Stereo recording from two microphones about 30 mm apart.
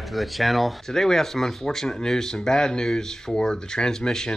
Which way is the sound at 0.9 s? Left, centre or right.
Centre.